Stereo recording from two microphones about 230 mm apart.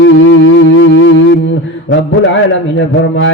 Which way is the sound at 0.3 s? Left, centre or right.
Left.